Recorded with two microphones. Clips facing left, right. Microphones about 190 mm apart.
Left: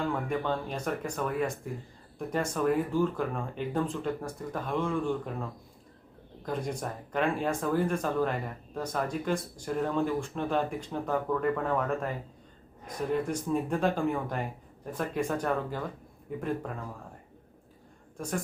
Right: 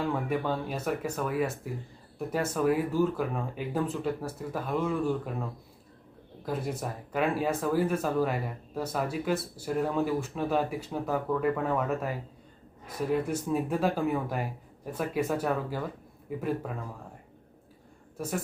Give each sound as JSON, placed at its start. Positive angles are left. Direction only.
{"t": 0.0, "sound": "speech", "side_deg": -5}
{"t": 18.2, "sound": "speech", "side_deg": -5}